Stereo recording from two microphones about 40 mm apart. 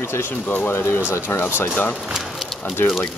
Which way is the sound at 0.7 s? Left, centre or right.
Left.